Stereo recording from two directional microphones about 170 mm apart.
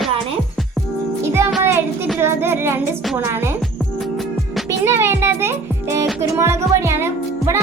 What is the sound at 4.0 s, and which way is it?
Music, centre (ahead or behind).